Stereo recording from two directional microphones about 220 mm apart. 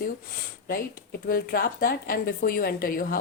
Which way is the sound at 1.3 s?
40° left (ahead or behind).